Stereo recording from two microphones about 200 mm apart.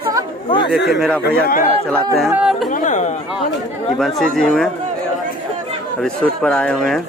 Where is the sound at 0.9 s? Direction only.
Centre (ahead or behind).